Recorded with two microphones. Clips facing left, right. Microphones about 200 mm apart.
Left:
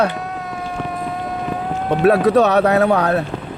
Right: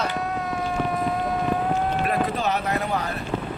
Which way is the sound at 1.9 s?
80° left.